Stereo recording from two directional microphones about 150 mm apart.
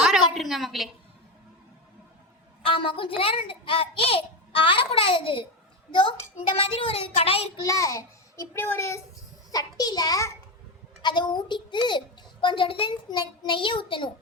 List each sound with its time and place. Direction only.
0.3 s a woman's voice: centre (ahead or behind)
2.6 s a child's voice: 35° left (ahead or behind)
7.6 s a child's voice: 20° left (ahead or behind)